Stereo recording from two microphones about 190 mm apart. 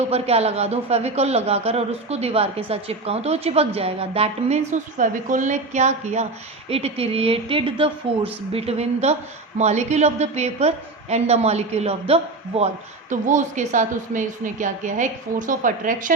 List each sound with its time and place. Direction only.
0.1 s a woman's voice: 35° right (ahead or behind)